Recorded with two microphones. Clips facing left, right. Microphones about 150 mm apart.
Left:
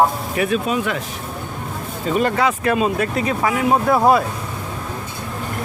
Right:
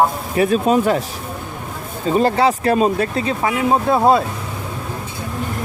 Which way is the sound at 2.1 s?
30° right (ahead or behind).